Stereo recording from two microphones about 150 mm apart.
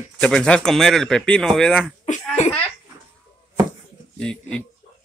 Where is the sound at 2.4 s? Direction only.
50° left (ahead or behind).